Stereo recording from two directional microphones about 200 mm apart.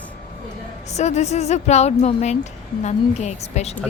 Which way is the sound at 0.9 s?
35° left (ahead or behind).